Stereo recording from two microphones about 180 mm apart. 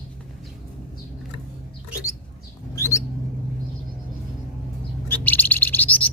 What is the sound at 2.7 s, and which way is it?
Bird, 15° left (ahead or behind).